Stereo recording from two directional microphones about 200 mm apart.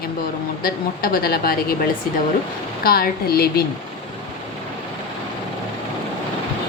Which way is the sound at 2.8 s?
50° left (ahead or behind).